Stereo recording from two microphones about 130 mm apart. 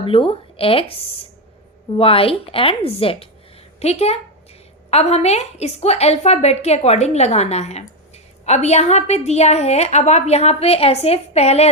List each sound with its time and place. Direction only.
0.0 s a woman's voice: 45° left (ahead or behind)